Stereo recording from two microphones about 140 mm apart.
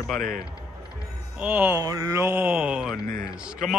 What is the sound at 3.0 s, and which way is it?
Speech, 90° right.